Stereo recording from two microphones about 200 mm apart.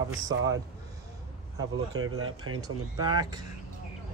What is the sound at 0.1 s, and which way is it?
Speech, 75° right (ahead or behind).